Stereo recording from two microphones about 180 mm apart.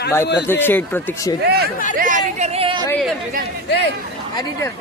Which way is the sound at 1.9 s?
45° right (ahead or behind).